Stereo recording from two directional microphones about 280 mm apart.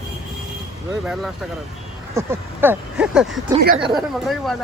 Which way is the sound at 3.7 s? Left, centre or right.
Centre.